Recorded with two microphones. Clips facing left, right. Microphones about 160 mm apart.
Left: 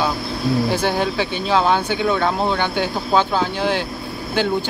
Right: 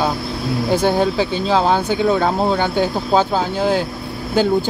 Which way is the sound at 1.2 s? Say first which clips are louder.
Right 2 dB; 40° right (ahead or behind).